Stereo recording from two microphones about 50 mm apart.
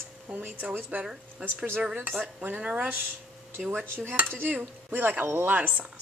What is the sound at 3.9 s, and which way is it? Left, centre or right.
Speech, right.